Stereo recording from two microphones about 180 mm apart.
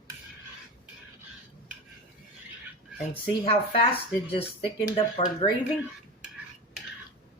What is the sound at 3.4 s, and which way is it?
Speech, 30° left (ahead or behind).